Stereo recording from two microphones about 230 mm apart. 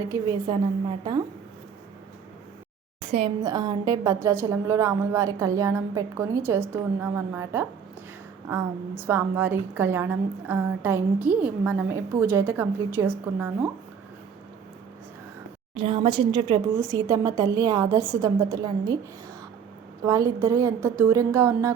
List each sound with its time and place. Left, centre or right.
0.1 s a woman's voice: centre
3.1 s a woman's voice: right; by 7.7 s centre
9.0 s a woman's voice: centre
15.7 s a woman's voice: right
20.1 s a woman's voice: centre